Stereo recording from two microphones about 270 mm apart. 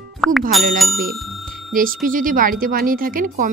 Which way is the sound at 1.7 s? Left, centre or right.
Right.